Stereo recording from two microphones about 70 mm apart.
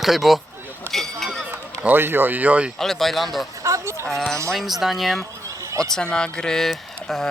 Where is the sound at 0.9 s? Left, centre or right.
Right.